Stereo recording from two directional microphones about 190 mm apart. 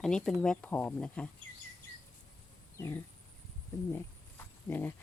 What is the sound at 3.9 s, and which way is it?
Insect, 10° left (ahead or behind).